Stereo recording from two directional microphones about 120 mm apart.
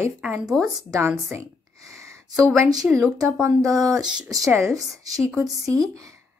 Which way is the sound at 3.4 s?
30° right (ahead or behind).